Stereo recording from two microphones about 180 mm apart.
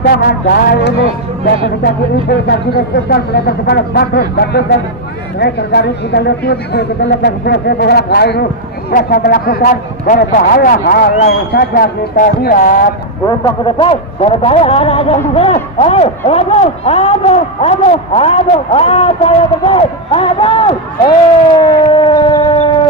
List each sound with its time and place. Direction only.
0.1 s speech: 60° left (ahead or behind)
2.2 s a woman's voice: 60° left (ahead or behind)
8.9 s a man's voice: 50° left (ahead or behind)
13.7 s speech: 30° left (ahead or behind)
21.9 s civil defense siren: 25° left (ahead or behind)